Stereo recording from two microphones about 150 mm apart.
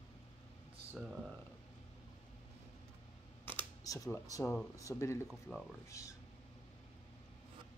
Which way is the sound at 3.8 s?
25° left (ahead or behind).